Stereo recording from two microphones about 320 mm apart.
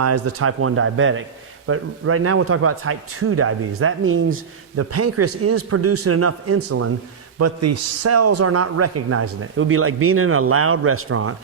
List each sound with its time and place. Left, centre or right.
0.0 s speech: right